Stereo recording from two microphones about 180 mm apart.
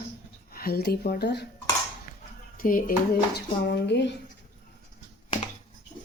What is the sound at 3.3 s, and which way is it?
Speech, 65° left (ahead or behind).